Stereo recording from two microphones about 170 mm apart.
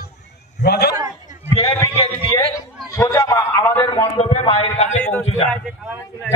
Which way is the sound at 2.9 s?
15° left (ahead or behind).